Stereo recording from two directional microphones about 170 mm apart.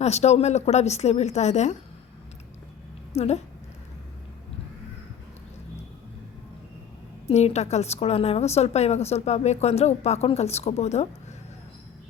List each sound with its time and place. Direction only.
0.0 s a woman's voice: 40° left (ahead or behind)
3.2 s a woman's voice: 40° left (ahead or behind)
7.3 s a woman's voice: 40° left (ahead or behind)